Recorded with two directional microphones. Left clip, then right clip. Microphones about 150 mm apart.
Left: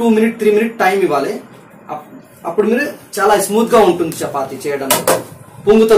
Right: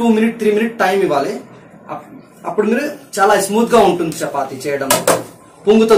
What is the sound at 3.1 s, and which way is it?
Speech, 15° right (ahead or behind).